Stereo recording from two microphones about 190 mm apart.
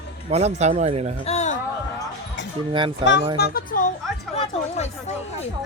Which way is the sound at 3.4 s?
50° left (ahead or behind).